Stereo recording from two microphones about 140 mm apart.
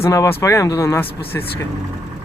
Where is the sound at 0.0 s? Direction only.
20° left (ahead or behind).